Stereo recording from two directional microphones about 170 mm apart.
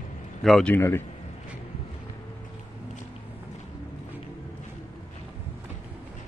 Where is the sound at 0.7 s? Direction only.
15° left (ahead or behind).